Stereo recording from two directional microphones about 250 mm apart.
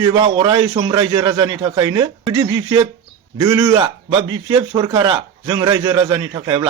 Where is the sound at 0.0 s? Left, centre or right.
Centre.